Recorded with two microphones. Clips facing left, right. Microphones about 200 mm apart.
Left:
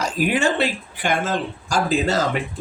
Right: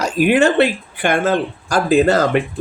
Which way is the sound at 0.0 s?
65° right (ahead or behind).